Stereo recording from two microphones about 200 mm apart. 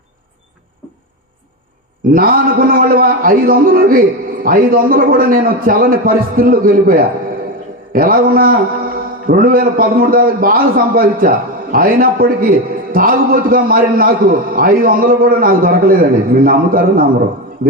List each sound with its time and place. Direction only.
2.1 s a man's voice: 45° right (ahead or behind)